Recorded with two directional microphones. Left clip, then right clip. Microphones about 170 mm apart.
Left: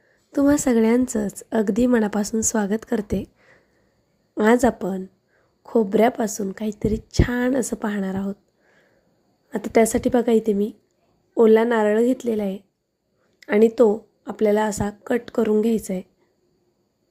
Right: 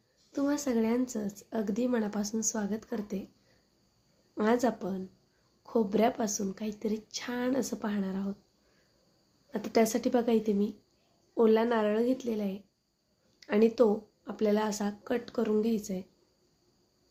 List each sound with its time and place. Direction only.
0.3 s a woman's voice: 50° left (ahead or behind)
4.4 s a woman's voice: 50° left (ahead or behind)
9.5 s a woman's voice: 45° left (ahead or behind)